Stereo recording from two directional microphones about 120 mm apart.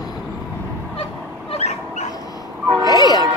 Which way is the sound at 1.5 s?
65° left (ahead or behind).